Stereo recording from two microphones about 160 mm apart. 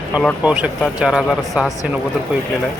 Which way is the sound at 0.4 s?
10° right (ahead or behind).